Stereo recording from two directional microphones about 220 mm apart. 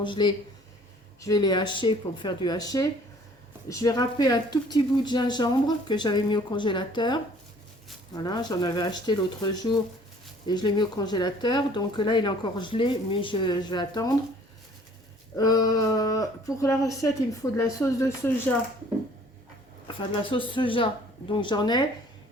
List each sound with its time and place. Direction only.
0.0 s speech: 20° left (ahead or behind)
15.4 s speech: 15° left (ahead or behind)
20.2 s speech: 25° left (ahead or behind)